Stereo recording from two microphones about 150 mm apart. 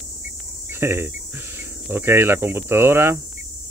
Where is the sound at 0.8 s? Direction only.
15° right (ahead or behind).